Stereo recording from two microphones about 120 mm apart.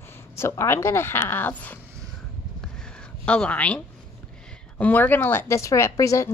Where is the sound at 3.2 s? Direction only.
10° left (ahead or behind); by 6.3 s 25° left (ahead or behind).